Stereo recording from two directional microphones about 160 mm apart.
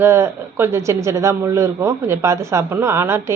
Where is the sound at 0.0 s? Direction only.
15° right (ahead or behind).